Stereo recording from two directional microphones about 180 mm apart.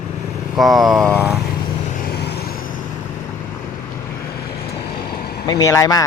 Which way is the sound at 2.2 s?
65° left (ahead or behind).